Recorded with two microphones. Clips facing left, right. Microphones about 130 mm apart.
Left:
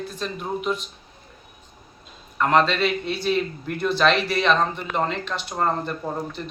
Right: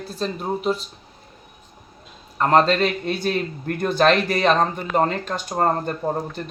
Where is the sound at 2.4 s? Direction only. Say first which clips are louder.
Right 3 dB; 35° right (ahead or behind).